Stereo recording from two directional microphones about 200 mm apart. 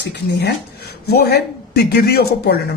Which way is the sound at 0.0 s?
55° left (ahead or behind).